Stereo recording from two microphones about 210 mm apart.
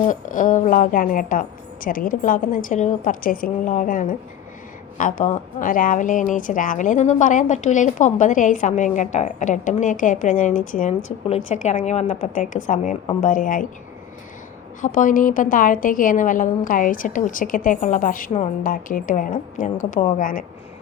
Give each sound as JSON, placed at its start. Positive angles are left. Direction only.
{"t": 0.1, "sound": "a woman's voice", "side_deg": 40}
{"t": 14.8, "sound": "a woman's voice", "side_deg": 40}